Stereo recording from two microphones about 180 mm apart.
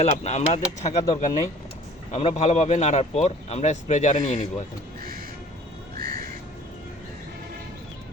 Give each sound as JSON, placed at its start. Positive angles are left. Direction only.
{"t": 0.0, "sound": "speech", "side_deg": 35}
{"t": 2.1, "sound": "speech", "side_deg": 35}
{"t": 6.0, "sound": "crow", "side_deg": -50}